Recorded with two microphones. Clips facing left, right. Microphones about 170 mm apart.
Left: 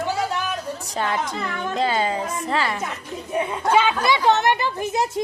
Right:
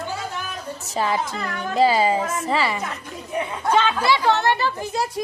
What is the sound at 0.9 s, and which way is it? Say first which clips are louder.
Speech: right 2 dB; centre (ahead or behind).